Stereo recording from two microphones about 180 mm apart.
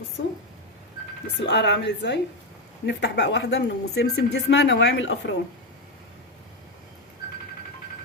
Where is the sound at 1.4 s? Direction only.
75° left (ahead or behind).